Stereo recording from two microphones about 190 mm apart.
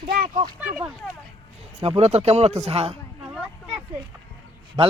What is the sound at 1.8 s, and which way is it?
Speech, 30° right (ahead or behind).